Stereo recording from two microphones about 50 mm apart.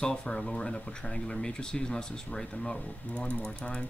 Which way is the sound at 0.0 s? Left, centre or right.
Centre.